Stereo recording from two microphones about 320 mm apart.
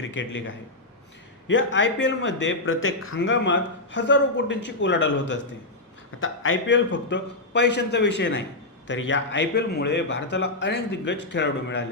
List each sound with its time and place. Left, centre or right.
0.0 s a man's voice: left
6.1 s a man's voice: left